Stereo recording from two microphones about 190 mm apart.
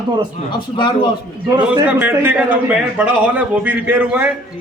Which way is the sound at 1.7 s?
10° right (ahead or behind).